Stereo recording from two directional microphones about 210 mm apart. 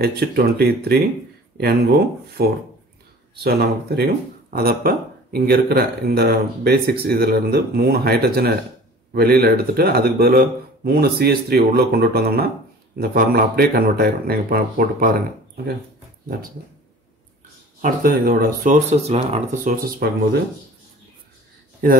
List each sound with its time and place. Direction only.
0.0 s speech: 50° right (ahead or behind)
17.8 s speech: 45° right (ahead or behind)
21.8 s speech: 45° right (ahead or behind)